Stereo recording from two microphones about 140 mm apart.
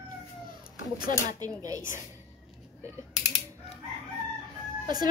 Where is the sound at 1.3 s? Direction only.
25° right (ahead or behind).